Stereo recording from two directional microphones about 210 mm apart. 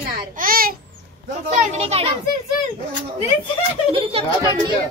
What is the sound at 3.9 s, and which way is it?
Speech, 25° right (ahead or behind).